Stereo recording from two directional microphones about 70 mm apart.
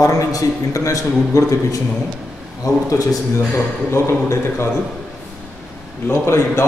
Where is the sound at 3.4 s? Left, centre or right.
Left.